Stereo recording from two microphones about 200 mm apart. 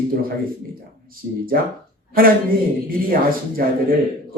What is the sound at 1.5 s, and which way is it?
Speech, 50° right (ahead or behind).